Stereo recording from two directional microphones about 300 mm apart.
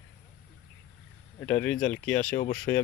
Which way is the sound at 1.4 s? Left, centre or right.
Centre.